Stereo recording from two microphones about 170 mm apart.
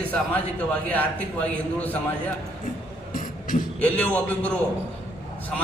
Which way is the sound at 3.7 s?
10° left (ahead or behind).